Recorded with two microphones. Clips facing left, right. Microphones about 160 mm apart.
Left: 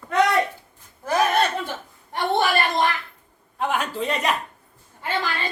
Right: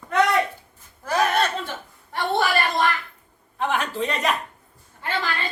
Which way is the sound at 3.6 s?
10° left (ahead or behind).